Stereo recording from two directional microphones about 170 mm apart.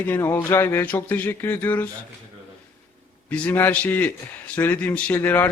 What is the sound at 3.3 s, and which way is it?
Speech, 10° left (ahead or behind).